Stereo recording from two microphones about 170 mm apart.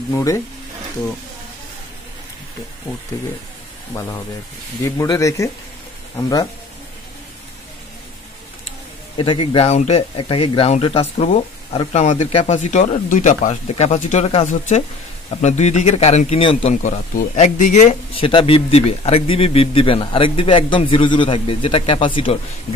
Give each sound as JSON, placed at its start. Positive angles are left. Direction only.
{"t": 4.8, "sound": "speech", "side_deg": 20}
{"t": 9.1, "sound": "a man's voice", "side_deg": 30}
{"t": 16.7, "sound": "speech", "side_deg": 45}
{"t": 18.1, "sound": "a man's voice", "side_deg": 30}